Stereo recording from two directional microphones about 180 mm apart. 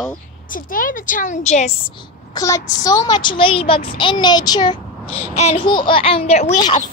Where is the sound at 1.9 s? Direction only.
25° left (ahead or behind).